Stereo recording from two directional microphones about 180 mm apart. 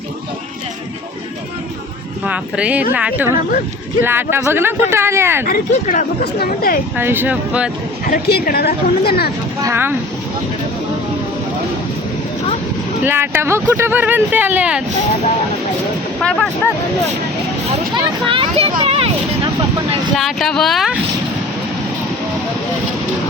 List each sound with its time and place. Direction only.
2.2 s speech: 5° right (ahead or behind)
5.5 s speech: 50° left (ahead or behind)
6.9 s speech: 10° right (ahead or behind)
8.0 s speech: 55° left (ahead or behind)
9.6 s speech: 10° right (ahead or behind)
13.1 s speech: 10° right (ahead or behind)
16.2 s speech: 5° left (ahead or behind)
17.9 s speech: 30° right (ahead or behind)
20.1 s speech: centre (ahead or behind)